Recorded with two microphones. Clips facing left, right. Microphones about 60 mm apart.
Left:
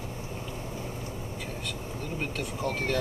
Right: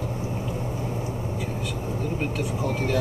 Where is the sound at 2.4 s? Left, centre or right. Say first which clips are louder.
Right 4 dB; centre.